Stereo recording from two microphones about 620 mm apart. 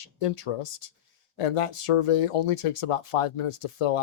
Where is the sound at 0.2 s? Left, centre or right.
Left.